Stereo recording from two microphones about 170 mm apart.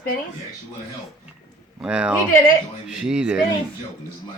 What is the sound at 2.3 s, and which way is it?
Speech, 55° left (ahead or behind).